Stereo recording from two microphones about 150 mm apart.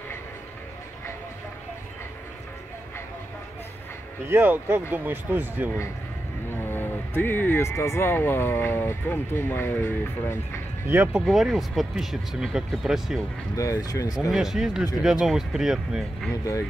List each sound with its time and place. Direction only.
4.3 s speech: 10° right (ahead or behind)
6.5 s speech: 15° left (ahead or behind)
10.9 s speech: 10° right (ahead or behind)
11.2 s speech: centre (ahead or behind)
13.6 s speech: 25° left (ahead or behind)
14.3 s speech: 5° right (ahead or behind)